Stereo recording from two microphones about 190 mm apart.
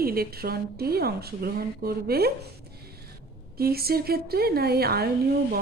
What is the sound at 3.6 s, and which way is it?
Speech, 55° right (ahead or behind).